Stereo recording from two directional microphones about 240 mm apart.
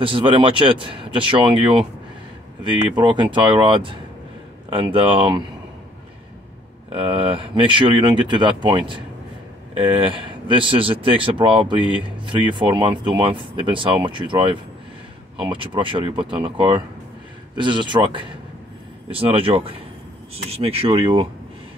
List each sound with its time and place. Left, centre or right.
0.0 s speech: right
6.9 s speech: right